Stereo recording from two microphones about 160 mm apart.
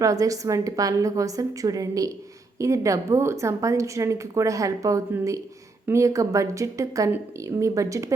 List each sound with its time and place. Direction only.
0.0 s a woman's voice: 20° right (ahead or behind)